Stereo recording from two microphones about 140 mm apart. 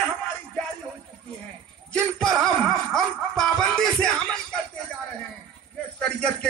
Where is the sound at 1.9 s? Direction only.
5° left (ahead or behind).